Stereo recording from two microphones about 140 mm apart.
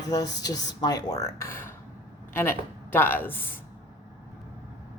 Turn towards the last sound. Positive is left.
turn(degrees=15)  # may be behind; listen again after turning